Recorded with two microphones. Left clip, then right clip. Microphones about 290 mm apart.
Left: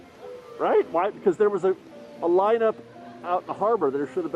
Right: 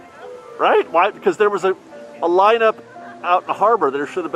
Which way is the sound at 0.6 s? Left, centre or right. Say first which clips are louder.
Right 7 dB; centre.